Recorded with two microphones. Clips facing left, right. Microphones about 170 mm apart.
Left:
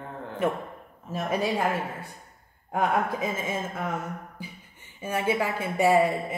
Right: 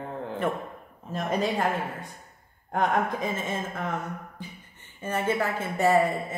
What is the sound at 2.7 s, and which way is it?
A woman's voice, 5° left (ahead or behind).